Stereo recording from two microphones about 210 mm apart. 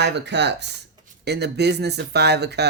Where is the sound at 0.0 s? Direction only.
55° right (ahead or behind).